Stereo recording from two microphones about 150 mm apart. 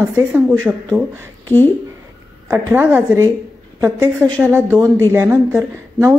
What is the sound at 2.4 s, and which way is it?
A woman's voice, 15° right (ahead or behind).